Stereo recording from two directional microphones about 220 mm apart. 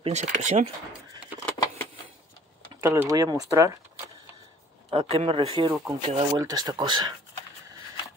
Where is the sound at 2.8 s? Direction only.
15° right (ahead or behind).